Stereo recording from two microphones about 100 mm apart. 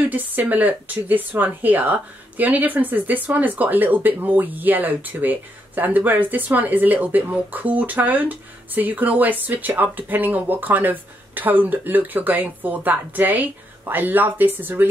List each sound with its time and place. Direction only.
0.1 s speech: 15° right (ahead or behind)